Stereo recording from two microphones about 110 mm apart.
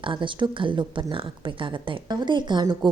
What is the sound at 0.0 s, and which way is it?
A woman's voice, 50° right (ahead or behind).